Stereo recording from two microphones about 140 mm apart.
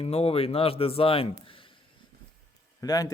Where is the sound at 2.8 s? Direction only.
25° left (ahead or behind).